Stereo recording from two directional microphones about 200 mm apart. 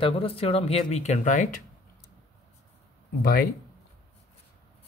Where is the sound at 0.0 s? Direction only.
25° left (ahead or behind).